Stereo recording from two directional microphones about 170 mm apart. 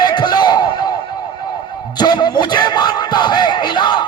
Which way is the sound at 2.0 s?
25° left (ahead or behind).